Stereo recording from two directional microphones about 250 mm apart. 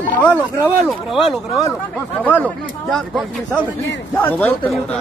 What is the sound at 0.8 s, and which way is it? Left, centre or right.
Speech, centre.